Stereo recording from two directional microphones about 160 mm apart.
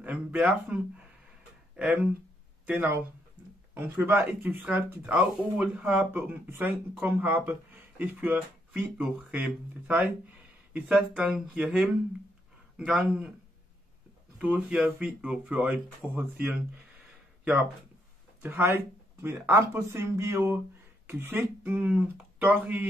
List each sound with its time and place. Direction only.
0.0 s a sound: 10° right (ahead or behind)
1.8 s speech: 10° right (ahead or behind)
14.4 s speech: 5° right (ahead or behind)
18.4 s speech: 15° right (ahead or behind)